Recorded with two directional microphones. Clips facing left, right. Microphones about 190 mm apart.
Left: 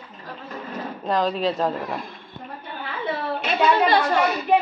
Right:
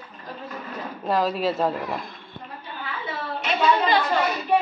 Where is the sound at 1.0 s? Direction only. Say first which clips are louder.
Even; 5° right (ahead or behind).